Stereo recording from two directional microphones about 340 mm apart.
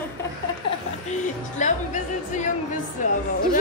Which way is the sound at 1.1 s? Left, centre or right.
Left.